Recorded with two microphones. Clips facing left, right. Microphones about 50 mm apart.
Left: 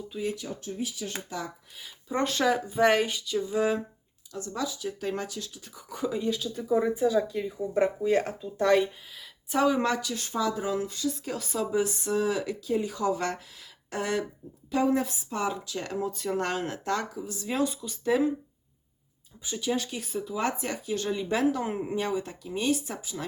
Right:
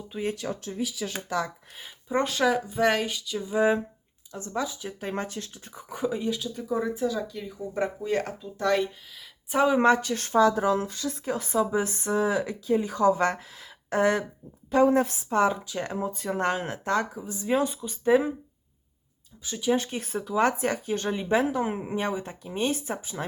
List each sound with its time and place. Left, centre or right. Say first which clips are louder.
0.1 s a woman's voice: right 2 dB; right
0.3 s speech: right 3 dB; right
2.0 s speech: right 2 dB; centre
3.6 s speech: right 6 dB; right
5.9 s speech: right 2 dB; right
6.2 s speech: left 1 dB; centre
6.8 s speech: left 3 dB; centre
9.5 s a woman's voice: right 4 dB; right
19.7 s a woman's voice: right 6 dB; right
20.1 s a woman's voice: right 5 dB; right